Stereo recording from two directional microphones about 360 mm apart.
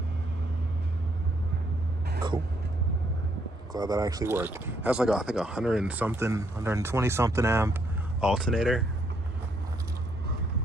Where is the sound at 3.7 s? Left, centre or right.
Centre.